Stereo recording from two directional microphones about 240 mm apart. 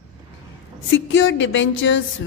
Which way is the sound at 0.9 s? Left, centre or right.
Left.